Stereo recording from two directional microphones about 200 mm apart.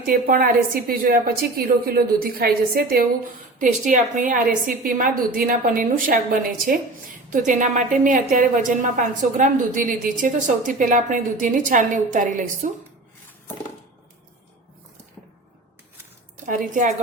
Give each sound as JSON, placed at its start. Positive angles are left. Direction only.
{"t": 0.0, "sound": "a woman's voice", "side_deg": -45}
{"t": 7.3, "sound": "a woman's voice", "side_deg": -40}
{"t": 16.5, "sound": "a woman's voice", "side_deg": -40}